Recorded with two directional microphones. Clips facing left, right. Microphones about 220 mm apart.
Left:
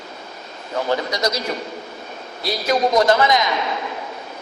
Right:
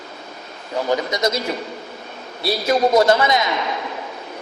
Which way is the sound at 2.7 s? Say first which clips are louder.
Right 1 dB; 25° right (ahead or behind).